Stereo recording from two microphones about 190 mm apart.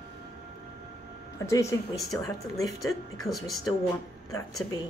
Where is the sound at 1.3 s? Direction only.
15° left (ahead or behind).